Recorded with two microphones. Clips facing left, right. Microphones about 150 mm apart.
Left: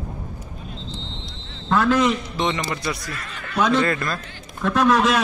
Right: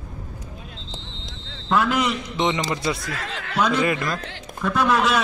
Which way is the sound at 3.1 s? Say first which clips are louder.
Right 3 dB; 90° right.